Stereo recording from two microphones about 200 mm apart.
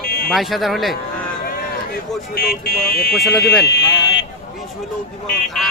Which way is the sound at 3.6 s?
60° left (ahead or behind).